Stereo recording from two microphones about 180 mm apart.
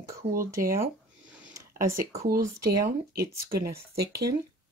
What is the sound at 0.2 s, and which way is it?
Speech, 35° right (ahead or behind).